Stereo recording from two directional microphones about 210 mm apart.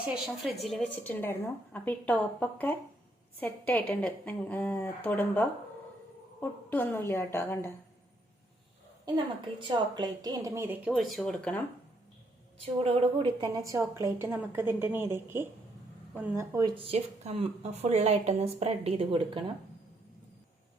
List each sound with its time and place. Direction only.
0.0 s a woman's voice: centre (ahead or behind)
9.0 s a woman's voice: 20° right (ahead or behind); by 11.6 s 5° left (ahead or behind)
12.8 s a woman's voice: 25° right (ahead or behind)